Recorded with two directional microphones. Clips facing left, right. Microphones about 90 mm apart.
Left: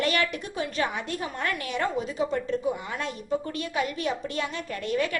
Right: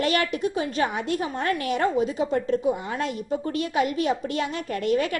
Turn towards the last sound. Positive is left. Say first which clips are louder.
# right 4 dB
turn(degrees=-35)  # may be behind; listen again after turning